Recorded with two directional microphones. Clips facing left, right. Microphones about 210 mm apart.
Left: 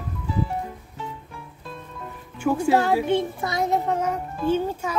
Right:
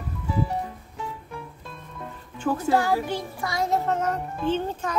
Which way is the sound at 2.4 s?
15° left (ahead or behind).